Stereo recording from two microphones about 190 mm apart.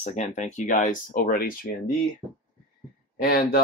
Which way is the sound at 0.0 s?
40° left (ahead or behind).